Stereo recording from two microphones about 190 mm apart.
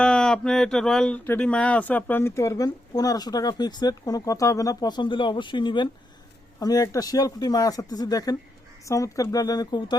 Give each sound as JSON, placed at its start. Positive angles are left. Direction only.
{"t": 0.0, "sound": "speech", "side_deg": 5}